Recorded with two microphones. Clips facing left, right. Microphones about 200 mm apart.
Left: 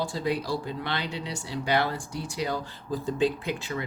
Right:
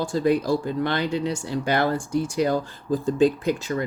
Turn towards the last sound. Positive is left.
turn(degrees=-45)  # may be behind; listen again after turning